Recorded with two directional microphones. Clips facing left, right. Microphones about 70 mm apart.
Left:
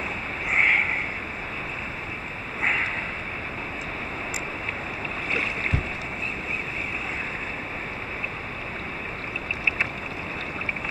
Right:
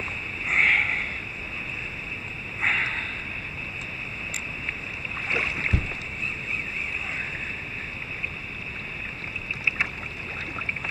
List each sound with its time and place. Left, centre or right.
0.6 s snort: centre